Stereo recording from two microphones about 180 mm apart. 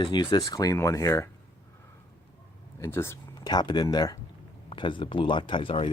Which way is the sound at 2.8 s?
15° left (ahead or behind).